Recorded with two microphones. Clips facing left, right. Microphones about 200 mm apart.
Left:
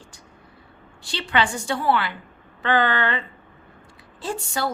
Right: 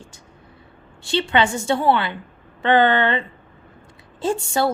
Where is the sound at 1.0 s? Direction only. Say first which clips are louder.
Right 5 dB; 25° right (ahead or behind).